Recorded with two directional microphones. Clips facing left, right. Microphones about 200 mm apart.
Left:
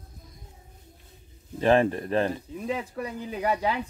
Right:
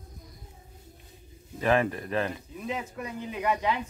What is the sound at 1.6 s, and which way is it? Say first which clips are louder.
Speech: left 4 dB; 30° left (ahead or behind).